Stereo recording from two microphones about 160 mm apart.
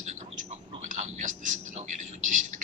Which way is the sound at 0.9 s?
55° right (ahead or behind).